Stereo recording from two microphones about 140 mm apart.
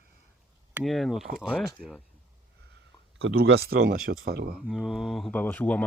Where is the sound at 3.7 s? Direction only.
90° right.